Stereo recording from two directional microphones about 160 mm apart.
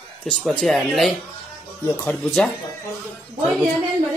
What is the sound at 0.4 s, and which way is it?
A man's voice, 5° left (ahead or behind).